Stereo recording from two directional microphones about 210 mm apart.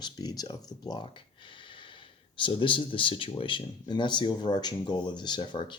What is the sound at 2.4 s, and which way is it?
Speech, 25° left (ahead or behind).